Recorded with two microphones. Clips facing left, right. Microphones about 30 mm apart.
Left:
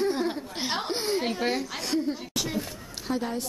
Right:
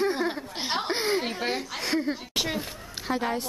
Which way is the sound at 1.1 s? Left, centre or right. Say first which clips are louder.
Left 1 dB; centre.